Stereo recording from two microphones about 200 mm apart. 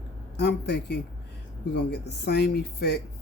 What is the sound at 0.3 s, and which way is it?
A woman's voice, 55° left (ahead or behind).